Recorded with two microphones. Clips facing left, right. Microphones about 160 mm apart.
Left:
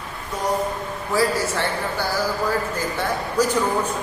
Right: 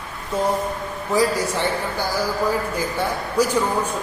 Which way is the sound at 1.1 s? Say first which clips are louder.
Right 1 dB; 20° right (ahead or behind).